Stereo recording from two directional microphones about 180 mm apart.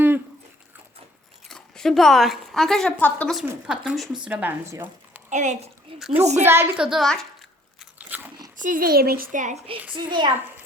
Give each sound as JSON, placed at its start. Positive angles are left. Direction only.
{"t": 1.5, "sound": "speech", "side_deg": 5}
{"t": 4.7, "sound": "a sound", "side_deg": -10}
{"t": 5.3, "sound": "a child's voice", "side_deg": -40}
{"t": 6.3, "sound": "speech", "side_deg": -15}
{"t": 7.9, "sound": "crunch", "side_deg": -10}
{"t": 8.5, "sound": "a woman's voice", "side_deg": -45}
{"t": 9.9, "sound": "a child's voice", "side_deg": -25}